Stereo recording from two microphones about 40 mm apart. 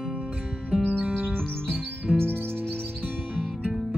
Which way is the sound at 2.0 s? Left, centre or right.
Right.